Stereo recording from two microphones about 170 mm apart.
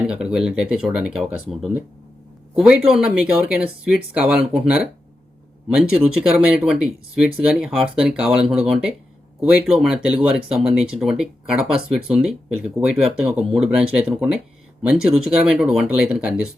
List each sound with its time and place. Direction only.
0.3 s speech: 5° right (ahead or behind)